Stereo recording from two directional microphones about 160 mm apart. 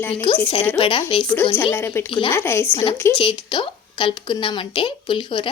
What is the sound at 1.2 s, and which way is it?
Speech, 10° left (ahead or behind).